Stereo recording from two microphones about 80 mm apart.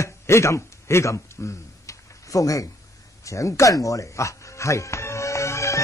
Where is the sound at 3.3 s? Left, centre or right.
Left.